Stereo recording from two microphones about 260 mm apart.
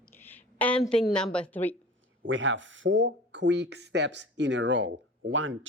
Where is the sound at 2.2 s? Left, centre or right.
Right.